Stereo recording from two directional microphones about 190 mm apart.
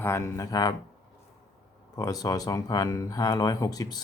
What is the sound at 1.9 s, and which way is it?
Speech, 20° left (ahead or behind).